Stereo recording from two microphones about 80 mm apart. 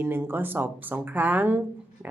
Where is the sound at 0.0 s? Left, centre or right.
Right.